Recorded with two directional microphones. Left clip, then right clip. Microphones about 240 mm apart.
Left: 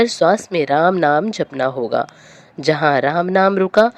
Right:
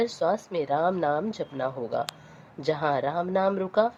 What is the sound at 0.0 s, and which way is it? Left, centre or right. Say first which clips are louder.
Speech: left 11 dB; left.